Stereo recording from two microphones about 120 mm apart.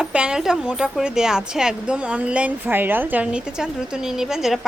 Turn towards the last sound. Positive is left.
turn(degrees=0)  # may be behind; listen again after turning